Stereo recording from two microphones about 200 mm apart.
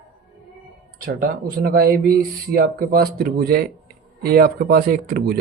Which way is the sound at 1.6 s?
50° right (ahead or behind).